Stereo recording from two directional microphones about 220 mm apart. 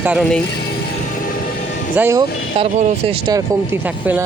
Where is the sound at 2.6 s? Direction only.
30° right (ahead or behind); by 4.3 s 5° right (ahead or behind).